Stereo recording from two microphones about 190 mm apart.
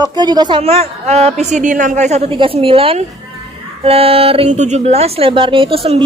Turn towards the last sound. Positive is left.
turn(degrees=-30)  # may be behind; listen again after turning